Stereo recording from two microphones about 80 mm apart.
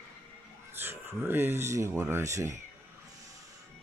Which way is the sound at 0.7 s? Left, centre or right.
Right.